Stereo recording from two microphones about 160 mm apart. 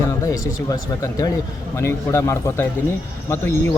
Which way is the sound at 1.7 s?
15° left (ahead or behind).